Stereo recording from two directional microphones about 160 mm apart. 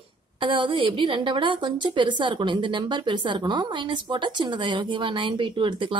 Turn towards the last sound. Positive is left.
turn(degrees=-30)  # may be behind; listen again after turning